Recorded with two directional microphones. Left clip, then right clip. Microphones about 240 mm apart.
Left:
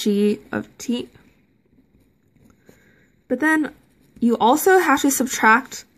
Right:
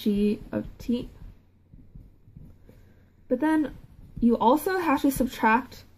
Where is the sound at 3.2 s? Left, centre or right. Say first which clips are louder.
Left 5 dB; left.